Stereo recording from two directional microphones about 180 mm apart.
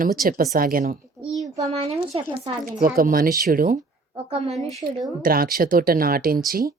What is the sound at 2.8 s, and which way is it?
Speech, 50° right (ahead or behind).